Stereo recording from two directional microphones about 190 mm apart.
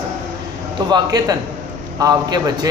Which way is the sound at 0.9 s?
20° right (ahead or behind).